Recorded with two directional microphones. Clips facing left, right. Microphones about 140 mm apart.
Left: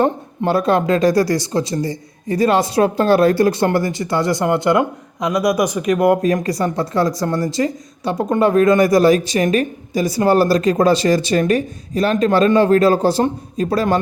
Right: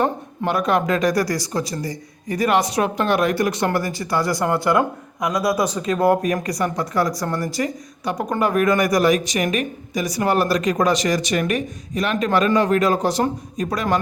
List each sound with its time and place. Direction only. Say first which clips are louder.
0.0 s speech: left 4 dB; 30° left (ahead or behind)